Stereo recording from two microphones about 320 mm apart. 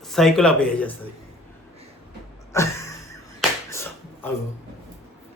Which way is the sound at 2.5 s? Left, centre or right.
Centre.